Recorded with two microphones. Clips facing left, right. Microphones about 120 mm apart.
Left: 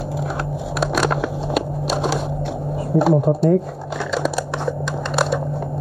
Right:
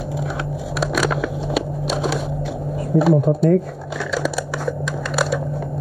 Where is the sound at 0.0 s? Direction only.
Centre (ahead or behind).